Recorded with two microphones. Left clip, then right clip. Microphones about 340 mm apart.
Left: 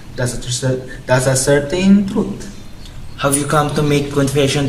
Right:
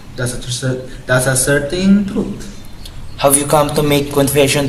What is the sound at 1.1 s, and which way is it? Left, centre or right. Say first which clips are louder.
Speech: even; centre.